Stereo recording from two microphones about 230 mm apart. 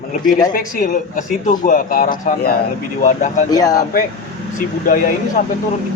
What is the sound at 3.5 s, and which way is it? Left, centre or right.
Speech, centre.